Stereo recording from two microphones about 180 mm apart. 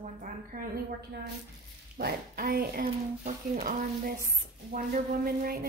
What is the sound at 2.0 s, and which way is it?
A woman's voice, 60° right (ahead or behind).